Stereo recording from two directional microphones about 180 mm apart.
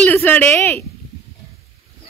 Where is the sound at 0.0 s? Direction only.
10° left (ahead or behind).